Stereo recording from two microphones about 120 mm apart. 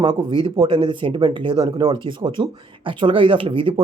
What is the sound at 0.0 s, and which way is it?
Speech, 40° right (ahead or behind).